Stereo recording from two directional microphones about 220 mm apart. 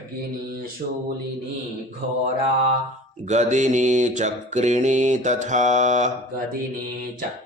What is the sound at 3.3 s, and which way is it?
Mantra, 30° right (ahead or behind).